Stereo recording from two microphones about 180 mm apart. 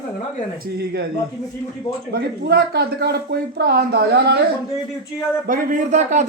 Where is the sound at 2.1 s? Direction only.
60° right (ahead or behind).